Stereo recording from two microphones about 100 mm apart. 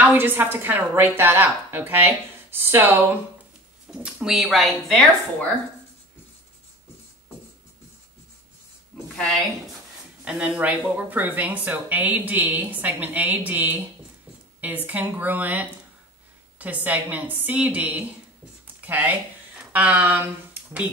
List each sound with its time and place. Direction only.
0.0 s a woman's voice: 20° right (ahead or behind)
4.0 s speech: 5° right (ahead or behind)
9.1 s a woman's voice: 10° left (ahead or behind)
10.2 s speech: 10° right (ahead or behind)